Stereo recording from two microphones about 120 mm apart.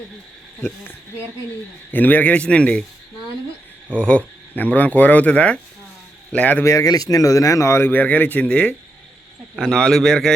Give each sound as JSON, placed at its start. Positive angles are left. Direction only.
{"t": 1.9, "sound": "speech", "side_deg": 15}
{"t": 3.9, "sound": "speech", "side_deg": 10}
{"t": 6.7, "sound": "a man's voice", "side_deg": 30}